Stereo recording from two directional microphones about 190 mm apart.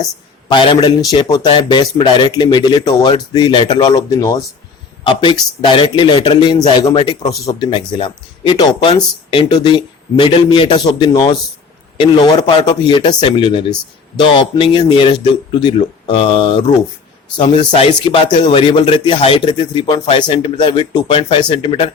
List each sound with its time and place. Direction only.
0.4 s a man's voice: 25° left (ahead or behind)